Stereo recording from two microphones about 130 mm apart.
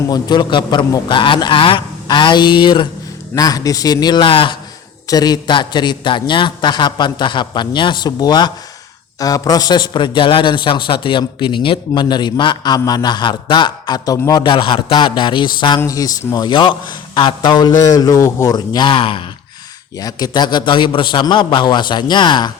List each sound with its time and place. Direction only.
0.1 s a man's voice: 35° left (ahead or behind)
5.0 s a man's voice: 30° left (ahead or behind)
20.0 s a man's voice: 30° left (ahead or behind)